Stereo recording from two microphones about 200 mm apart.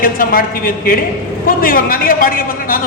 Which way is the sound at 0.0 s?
45° left (ahead or behind).